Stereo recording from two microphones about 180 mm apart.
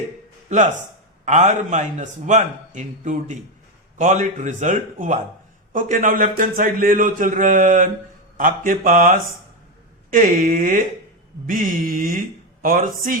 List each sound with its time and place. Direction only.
0.4 s a man's voice: 40° right (ahead or behind)